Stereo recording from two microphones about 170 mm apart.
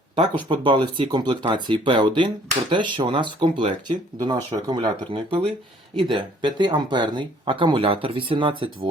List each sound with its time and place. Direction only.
0.2 s speech: 30° right (ahead or behind)
6.0 s speech: 30° right (ahead or behind)